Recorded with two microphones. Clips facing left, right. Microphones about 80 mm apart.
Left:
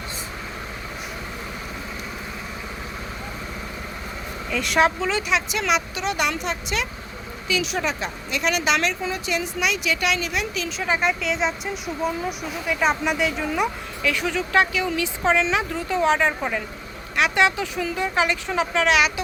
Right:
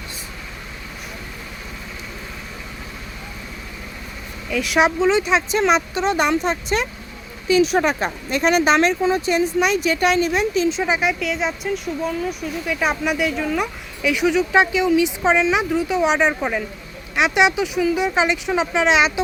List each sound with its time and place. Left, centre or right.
4.5 s speech: centre
4.8 s speech: right
10.9 s speech: centre
14.0 s speech: centre